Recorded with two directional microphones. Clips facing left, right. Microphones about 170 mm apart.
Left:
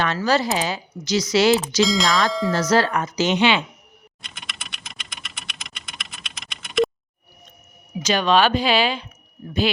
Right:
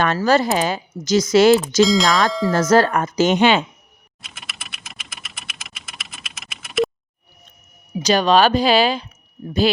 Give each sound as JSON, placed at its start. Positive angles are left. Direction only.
{"t": 0.0, "sound": "speech", "side_deg": -50}
{"t": 1.8, "sound": "speech", "side_deg": 0}
{"t": 2.5, "sound": "speech", "side_deg": -50}
{"t": 4.2, "sound": "computer keyboard", "side_deg": 0}
{"t": 7.9, "sound": "speech", "side_deg": -35}